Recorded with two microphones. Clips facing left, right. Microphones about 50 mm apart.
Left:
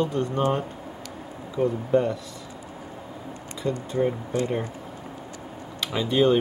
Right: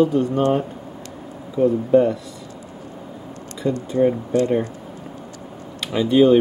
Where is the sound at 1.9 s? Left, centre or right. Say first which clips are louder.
Right 7 dB; centre.